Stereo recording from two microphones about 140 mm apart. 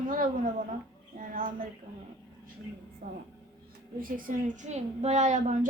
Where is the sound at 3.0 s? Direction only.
90° right.